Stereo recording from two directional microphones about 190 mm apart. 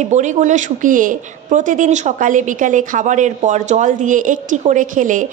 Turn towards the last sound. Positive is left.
turn(degrees=-45)  # may be behind; listen again after turning